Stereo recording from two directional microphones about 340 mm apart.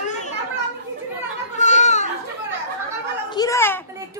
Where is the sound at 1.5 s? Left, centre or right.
Left.